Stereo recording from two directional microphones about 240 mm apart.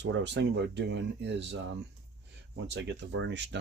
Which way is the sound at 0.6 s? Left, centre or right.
Right.